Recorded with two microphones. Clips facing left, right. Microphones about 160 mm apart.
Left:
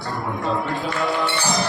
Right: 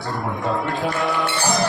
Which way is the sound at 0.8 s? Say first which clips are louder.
Right 1 dB; centre (ahead or behind).